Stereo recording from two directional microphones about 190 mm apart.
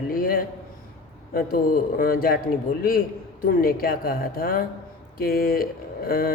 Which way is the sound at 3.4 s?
50° left (ahead or behind).